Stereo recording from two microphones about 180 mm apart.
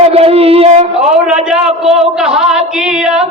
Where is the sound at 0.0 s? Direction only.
35° right (ahead or behind).